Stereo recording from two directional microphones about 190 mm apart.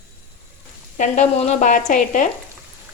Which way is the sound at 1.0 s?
40° left (ahead or behind).